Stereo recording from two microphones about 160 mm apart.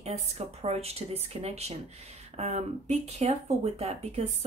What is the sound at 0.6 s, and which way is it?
Speech, 40° right (ahead or behind).